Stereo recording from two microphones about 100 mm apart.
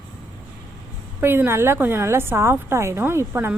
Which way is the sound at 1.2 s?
20° right (ahead or behind).